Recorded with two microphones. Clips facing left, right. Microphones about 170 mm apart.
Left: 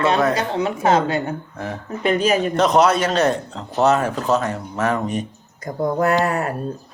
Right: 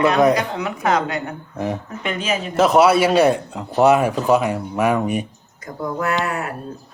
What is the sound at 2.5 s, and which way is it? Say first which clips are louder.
Speech: right 5 dB; 5° right (ahead or behind).